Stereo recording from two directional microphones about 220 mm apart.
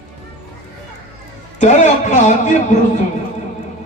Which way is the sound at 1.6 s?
35° left (ahead or behind).